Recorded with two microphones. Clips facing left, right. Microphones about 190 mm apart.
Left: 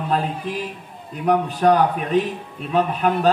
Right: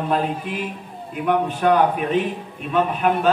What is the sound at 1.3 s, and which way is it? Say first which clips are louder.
A man's voice: left 2 dB; 35° left (ahead or behind).